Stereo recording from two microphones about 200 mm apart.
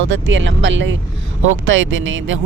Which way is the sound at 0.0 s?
70° right (ahead or behind).